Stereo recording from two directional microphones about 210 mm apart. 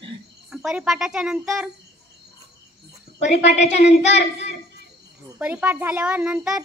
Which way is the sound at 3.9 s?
55° left (ahead or behind).